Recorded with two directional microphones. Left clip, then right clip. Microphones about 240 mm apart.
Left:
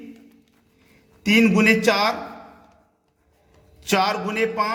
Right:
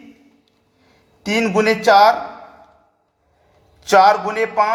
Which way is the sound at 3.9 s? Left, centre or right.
Centre.